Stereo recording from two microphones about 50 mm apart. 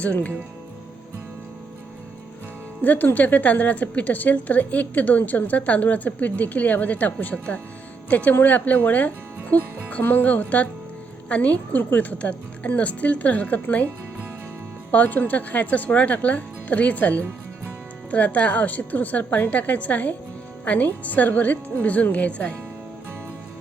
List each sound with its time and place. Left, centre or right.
0.0 s speech: left
2.8 s a woman's voice: left
10.0 s a woman's voice: left
14.9 s a woman's voice: left